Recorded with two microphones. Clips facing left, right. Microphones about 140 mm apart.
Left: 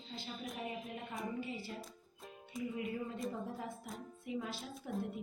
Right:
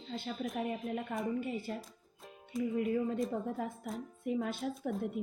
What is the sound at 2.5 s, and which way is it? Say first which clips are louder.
Speech: right 7 dB; centre (ahead or behind).